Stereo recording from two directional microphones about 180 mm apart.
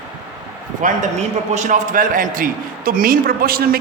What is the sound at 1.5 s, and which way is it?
A man's voice, 45° right (ahead or behind).